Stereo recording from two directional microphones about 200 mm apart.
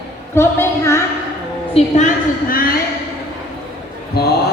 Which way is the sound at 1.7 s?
40° left (ahead or behind).